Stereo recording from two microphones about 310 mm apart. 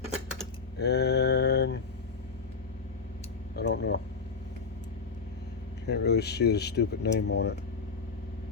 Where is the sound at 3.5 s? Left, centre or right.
Left.